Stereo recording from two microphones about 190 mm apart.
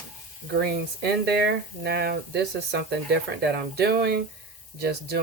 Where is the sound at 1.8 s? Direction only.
55° right (ahead or behind).